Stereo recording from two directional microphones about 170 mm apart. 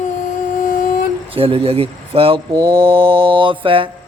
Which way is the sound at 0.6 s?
50° left (ahead or behind).